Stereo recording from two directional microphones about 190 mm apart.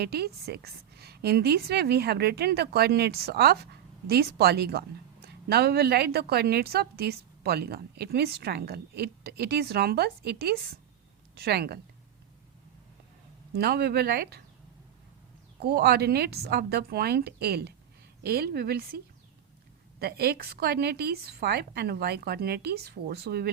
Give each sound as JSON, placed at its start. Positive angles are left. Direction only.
{"t": 0.0, "sound": "a woman's voice", "side_deg": -55}
{"t": 13.5, "sound": "a woman's voice", "side_deg": -55}
{"t": 15.6, "sound": "a woman's voice", "side_deg": -55}
{"t": 20.0, "sound": "a woman's voice", "side_deg": -55}